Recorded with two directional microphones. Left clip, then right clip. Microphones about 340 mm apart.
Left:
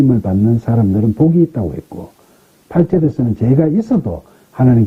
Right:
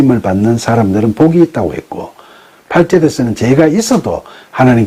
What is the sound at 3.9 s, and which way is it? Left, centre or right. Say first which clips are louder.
Speech: right 6 dB; centre.